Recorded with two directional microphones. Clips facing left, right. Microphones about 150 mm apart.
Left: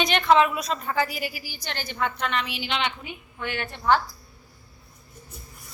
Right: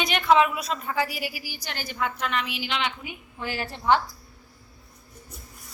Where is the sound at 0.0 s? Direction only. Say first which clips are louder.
Left 1 dB; 5° right (ahead or behind).